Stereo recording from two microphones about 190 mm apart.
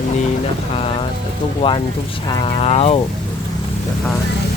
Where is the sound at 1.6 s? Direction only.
30° left (ahead or behind).